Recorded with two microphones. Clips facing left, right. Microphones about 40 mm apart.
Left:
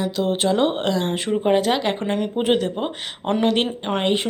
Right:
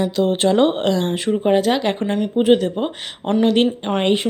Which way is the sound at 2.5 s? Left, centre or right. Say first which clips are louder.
Right 5 dB; left.